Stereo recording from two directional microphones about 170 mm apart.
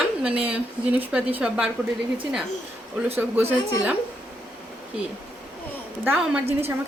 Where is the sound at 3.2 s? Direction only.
10° right (ahead or behind).